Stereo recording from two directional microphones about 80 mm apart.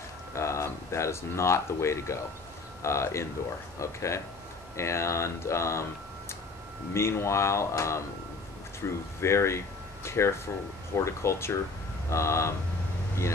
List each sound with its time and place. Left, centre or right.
0.3 s speech: left